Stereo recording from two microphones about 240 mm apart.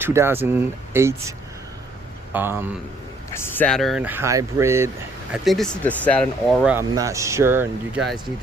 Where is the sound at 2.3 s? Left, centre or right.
Centre.